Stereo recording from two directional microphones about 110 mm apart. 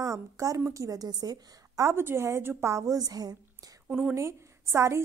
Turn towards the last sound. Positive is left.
turn(degrees=-25)  # may be behind; listen again after turning